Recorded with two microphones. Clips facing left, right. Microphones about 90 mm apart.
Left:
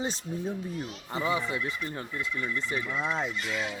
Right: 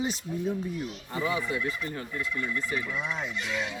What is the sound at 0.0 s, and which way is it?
A man's voice, 30° left (ahead or behind).